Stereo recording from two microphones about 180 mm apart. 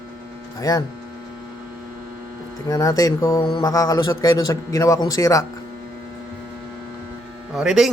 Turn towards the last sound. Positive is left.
turn(degrees=0)  # may be behind; listen again after turning